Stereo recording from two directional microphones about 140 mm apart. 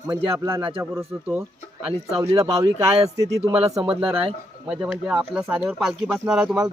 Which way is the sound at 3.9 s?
10° right (ahead or behind).